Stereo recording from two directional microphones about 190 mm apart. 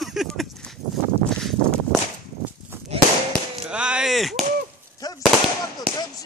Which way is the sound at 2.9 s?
30° right (ahead or behind).